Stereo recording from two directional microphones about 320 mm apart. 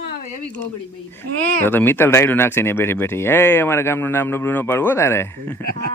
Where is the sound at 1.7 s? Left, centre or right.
Centre.